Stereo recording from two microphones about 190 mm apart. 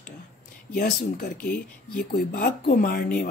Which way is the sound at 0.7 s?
55° left (ahead or behind).